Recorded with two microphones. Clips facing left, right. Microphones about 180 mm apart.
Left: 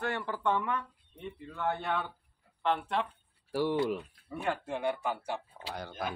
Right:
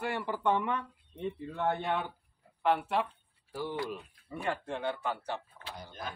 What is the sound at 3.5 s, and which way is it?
Speech, 80° left.